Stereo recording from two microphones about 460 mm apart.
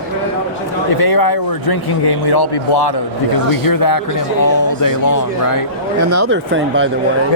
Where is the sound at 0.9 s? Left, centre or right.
Left.